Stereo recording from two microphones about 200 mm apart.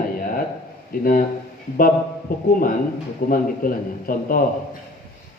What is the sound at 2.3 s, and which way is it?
A man's voice, 50° left (ahead or behind).